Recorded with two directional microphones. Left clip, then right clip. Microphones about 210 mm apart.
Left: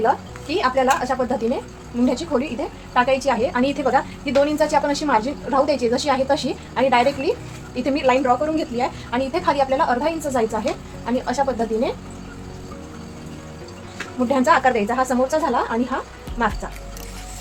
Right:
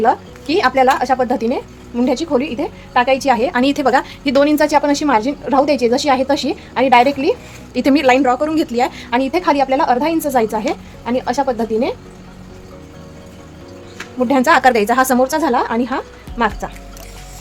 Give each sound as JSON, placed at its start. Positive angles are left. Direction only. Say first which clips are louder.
{"t": 0.0, "sound": "a woman's voice", "louder": "right 5 dB", "side_deg": -55}
{"t": 14.3, "sound": "a woman's voice", "louder": "right 5 dB", "side_deg": -55}